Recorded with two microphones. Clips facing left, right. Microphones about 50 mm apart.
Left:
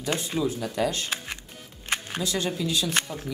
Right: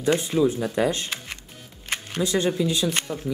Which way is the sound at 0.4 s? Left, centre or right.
Centre.